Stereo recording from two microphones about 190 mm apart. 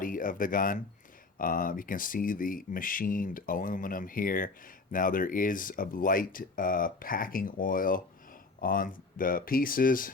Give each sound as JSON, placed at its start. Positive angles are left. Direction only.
{"t": 0.0, "sound": "speech", "side_deg": 45}